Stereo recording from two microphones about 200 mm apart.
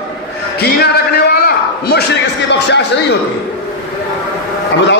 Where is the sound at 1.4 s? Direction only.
55° left (ahead or behind).